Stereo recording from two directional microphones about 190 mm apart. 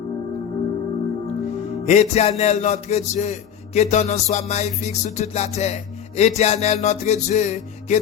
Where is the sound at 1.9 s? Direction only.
35° left (ahead or behind).